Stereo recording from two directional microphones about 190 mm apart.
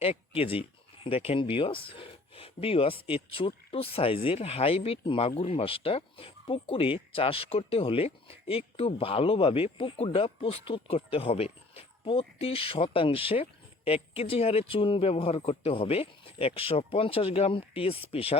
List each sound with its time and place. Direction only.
0.0 s speech: 30° left (ahead or behind)